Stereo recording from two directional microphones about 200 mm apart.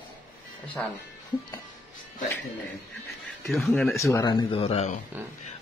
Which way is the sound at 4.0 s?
15° left (ahead or behind).